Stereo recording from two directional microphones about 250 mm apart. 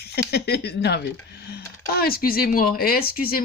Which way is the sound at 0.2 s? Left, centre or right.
Left.